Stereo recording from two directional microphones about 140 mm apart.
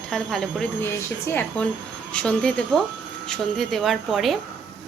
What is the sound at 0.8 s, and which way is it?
A woman's voice, 15° left (ahead or behind).